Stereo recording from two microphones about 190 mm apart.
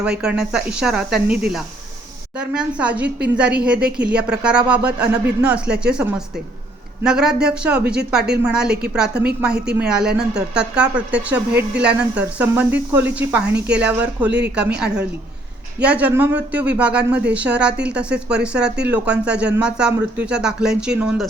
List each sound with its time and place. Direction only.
0.2 s speech: 5° right (ahead or behind)
2.4 s speech: 5° right (ahead or behind)
13.5 s speech: 65° right (ahead or behind)
13.8 s speech: 5° right (ahead or behind)
14.3 s speech: 65° right (ahead or behind)
14.8 s speech: 5° right (ahead or behind)